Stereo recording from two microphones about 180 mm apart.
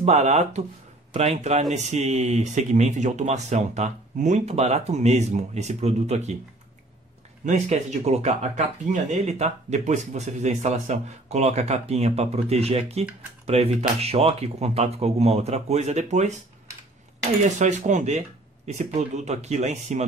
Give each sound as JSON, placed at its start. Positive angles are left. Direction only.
{"t": 0.0, "sound": "speech", "side_deg": -40}
{"t": 7.4, "sound": "speech", "side_deg": -40}
{"t": 17.6, "sound": "speech", "side_deg": -40}